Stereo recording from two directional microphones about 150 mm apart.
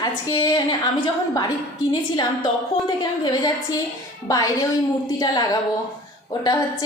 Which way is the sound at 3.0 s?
30° left (ahead or behind).